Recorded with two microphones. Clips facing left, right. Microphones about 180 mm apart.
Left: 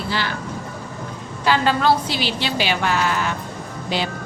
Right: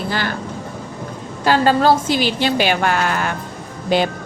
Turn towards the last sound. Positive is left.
turn(degrees=-50)  # may be behind; listen again after turning